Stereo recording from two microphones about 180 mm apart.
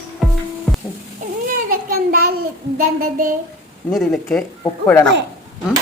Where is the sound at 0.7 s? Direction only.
Centre (ahead or behind).